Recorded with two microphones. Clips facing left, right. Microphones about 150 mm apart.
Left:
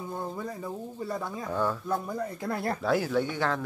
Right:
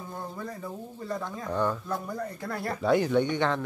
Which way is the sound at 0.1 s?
10° left (ahead or behind).